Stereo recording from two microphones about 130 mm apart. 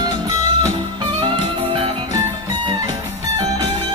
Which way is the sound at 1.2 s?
40° right (ahead or behind).